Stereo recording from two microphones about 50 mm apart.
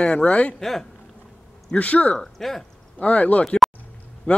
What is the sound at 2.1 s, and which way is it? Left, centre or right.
Speech, centre.